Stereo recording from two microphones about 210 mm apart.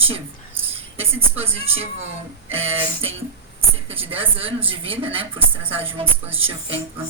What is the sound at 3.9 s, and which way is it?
A woman's voice, 25° right (ahead or behind).